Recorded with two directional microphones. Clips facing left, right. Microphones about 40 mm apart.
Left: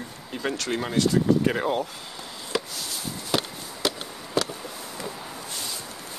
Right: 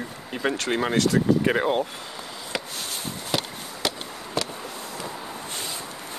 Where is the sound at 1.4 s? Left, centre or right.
Right.